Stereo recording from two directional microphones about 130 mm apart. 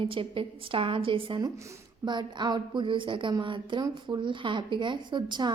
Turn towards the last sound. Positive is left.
turn(degrees=-35)  # may be behind; listen again after turning